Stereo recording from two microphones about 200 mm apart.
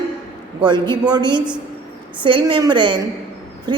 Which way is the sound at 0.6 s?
20° right (ahead or behind).